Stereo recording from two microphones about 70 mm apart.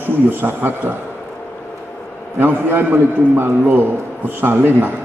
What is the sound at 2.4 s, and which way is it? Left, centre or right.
A man's voice, right.